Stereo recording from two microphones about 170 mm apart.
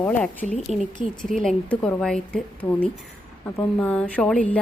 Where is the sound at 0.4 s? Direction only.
40° left (ahead or behind).